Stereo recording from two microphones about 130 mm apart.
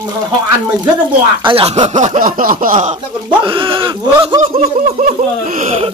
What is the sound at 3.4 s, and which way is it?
Speech, 40° right (ahead or behind).